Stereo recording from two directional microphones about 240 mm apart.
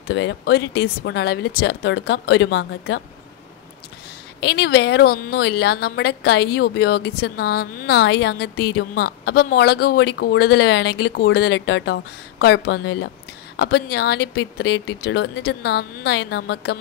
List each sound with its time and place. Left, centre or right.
0.1 s a woman's voice: left
4.4 s a woman's voice: left